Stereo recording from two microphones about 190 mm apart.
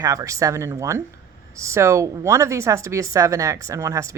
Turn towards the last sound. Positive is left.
turn(degrees=-15)  # may be behind; listen again after turning